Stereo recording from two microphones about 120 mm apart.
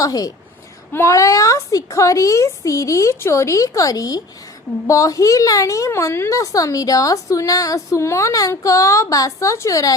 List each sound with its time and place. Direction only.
0.0 s a woman's voice: 30° left (ahead or behind)